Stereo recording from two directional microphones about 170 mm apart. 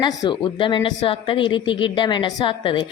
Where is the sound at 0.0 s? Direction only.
25° left (ahead or behind).